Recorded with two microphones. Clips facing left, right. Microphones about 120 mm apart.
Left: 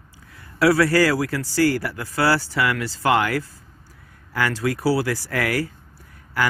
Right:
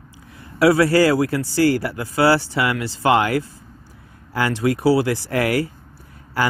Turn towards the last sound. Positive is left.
turn(degrees=-30)  # may be behind; listen again after turning